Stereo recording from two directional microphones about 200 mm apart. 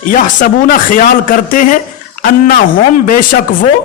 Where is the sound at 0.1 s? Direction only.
40° left (ahead or behind).